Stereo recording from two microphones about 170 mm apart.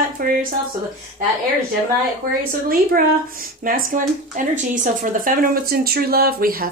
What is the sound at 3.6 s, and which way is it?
Speech, 55° right (ahead or behind).